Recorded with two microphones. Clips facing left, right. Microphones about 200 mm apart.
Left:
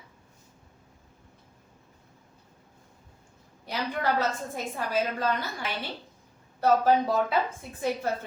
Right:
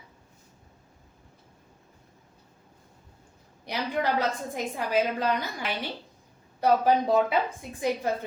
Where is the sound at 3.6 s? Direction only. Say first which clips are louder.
Right 1 dB; 15° right (ahead or behind).